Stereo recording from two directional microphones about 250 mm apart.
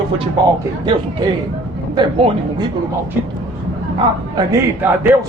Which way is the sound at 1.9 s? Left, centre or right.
Centre.